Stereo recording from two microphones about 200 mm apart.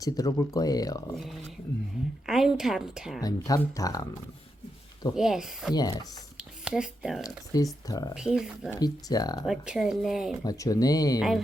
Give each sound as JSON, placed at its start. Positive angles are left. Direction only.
{"t": 0.0, "sound": "speech", "side_deg": 20}
{"t": 1.1, "sound": "a woman's voice", "side_deg": 0}
{"t": 3.2, "sound": "speech", "side_deg": 15}
{"t": 5.1, "sound": "a woman's voice", "side_deg": 0}
{"t": 5.7, "sound": "speech", "side_deg": 20}
{"t": 6.3, "sound": "a sound", "side_deg": -5}
{"t": 7.3, "sound": "speech", "side_deg": 20}
{"t": 8.1, "sound": "a woman's voice", "side_deg": -5}
{"t": 8.7, "sound": "speech", "side_deg": 20}
{"t": 9.5, "sound": "a woman's voice", "side_deg": 0}
{"t": 10.4, "sound": "speech", "side_deg": 15}